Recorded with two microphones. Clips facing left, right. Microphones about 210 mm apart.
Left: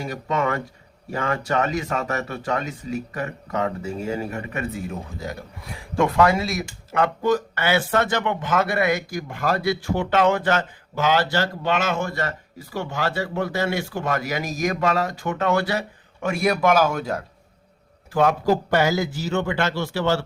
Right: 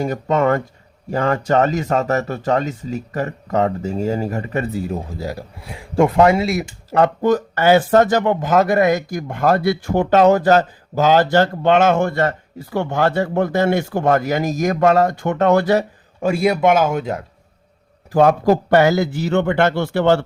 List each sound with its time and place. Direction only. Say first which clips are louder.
0.0 s speech: right 7 dB; 50° right (ahead or behind); by 7.1 s 30° right (ahead or behind)
7.2 s speech: right 5 dB; 50° right (ahead or behind)
16.2 s a man's voice: right 5 dB; 25° right (ahead or behind)
18.1 s speech: right 6 dB; 40° right (ahead or behind)
18.4 s a man's voice: right 6 dB; 65° right (ahead or behind)